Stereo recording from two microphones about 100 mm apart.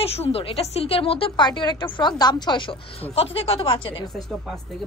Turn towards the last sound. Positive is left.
turn(degrees=65)  # may be behind; listen again after turning